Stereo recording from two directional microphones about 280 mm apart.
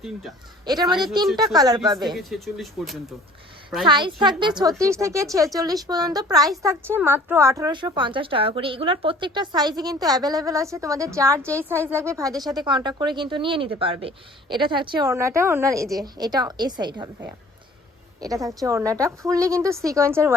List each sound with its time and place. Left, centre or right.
0.0 s speech: centre
0.6 s a woman's voice: centre
2.1 s speech: centre
3.8 s a woman's voice: centre